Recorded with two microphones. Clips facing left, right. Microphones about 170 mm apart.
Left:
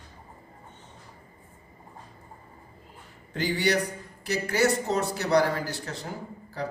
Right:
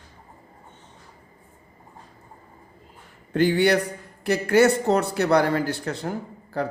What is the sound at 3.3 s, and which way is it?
Speech, 55° right (ahead or behind).